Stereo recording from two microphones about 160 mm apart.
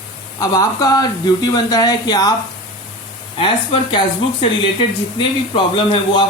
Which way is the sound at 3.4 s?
35° left (ahead or behind).